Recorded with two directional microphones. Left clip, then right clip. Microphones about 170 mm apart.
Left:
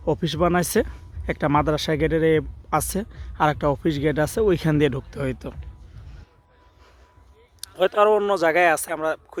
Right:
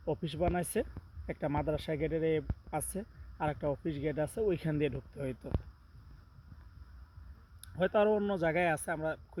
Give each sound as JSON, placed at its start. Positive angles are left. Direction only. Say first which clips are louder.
{"t": 0.4, "sound": "speech", "louder": "left 12 dB", "side_deg": 5}
{"t": 5.2, "sound": "speech", "louder": "left 11 dB", "side_deg": -5}
{"t": 7.6, "sound": "speech", "louder": "left 11 dB", "side_deg": 0}